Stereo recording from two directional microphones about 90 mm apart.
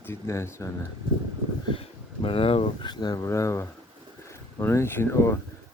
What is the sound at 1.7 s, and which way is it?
Speech, 85° left.